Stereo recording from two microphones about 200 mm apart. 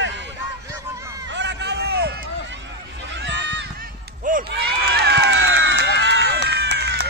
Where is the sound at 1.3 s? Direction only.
60° right (ahead or behind).